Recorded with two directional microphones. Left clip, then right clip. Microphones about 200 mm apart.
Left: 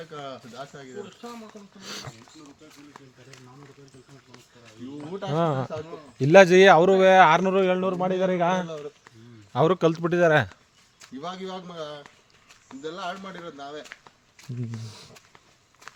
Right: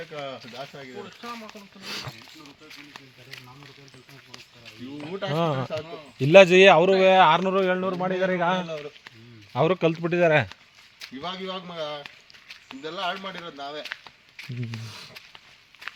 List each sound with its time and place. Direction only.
0.1 s speech: 30° right (ahead or behind)
1.8 s speech: 45° right (ahead or behind)
4.9 s speech: 40° right (ahead or behind)
5.3 s speech: 10° left (ahead or behind)
11.2 s a man's voice: 30° right (ahead or behind)